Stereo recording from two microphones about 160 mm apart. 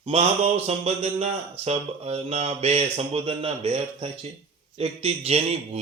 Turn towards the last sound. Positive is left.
turn(degrees=-40)  # may be behind; listen again after turning